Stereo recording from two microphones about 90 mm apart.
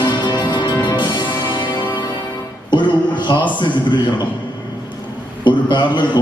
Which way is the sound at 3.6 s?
60° left (ahead or behind).